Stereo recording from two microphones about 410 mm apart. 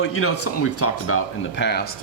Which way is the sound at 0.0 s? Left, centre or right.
Left.